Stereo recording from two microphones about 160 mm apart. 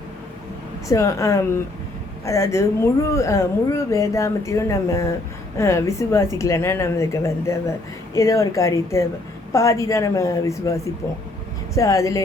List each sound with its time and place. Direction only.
0.9 s a woman's voice: 20° left (ahead or behind)